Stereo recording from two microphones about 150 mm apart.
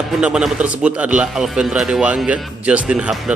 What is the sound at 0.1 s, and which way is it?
Speech, 5° right (ahead or behind).